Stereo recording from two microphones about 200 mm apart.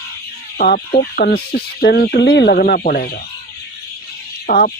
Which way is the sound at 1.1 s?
50° left (ahead or behind).